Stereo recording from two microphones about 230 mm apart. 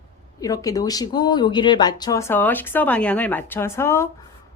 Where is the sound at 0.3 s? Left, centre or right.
Centre.